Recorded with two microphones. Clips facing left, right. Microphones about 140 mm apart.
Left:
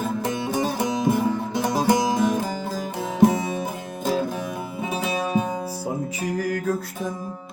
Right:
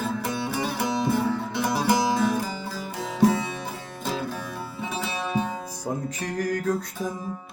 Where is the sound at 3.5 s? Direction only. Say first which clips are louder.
Left 6 dB; 45° left (ahead or behind).